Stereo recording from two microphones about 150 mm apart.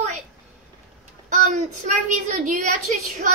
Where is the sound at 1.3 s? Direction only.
55° right (ahead or behind).